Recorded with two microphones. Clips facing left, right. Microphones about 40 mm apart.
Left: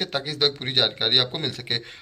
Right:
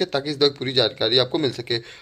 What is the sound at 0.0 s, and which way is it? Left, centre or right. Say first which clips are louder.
A man's voice: right 4 dB; left.